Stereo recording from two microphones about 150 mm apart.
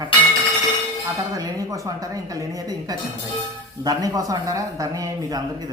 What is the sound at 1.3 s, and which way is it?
Speech, 20° right (ahead or behind).